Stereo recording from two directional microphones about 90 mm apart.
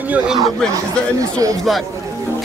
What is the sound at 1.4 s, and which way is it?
Speech, 40° right (ahead or behind).